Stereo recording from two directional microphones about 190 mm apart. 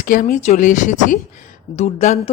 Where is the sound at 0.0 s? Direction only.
45° left (ahead or behind).